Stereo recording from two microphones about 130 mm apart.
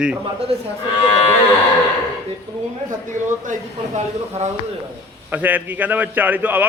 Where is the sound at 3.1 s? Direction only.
80° right; by 4.5 s 60° right (ahead or behind).